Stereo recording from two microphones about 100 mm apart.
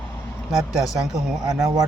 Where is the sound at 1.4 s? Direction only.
35° right (ahead or behind).